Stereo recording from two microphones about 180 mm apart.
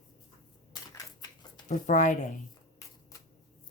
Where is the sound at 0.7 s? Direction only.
20° left (ahead or behind).